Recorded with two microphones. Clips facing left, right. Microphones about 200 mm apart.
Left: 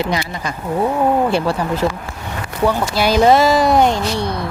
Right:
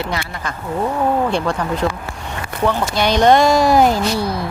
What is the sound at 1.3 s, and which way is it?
Speech, 5° left (ahead or behind).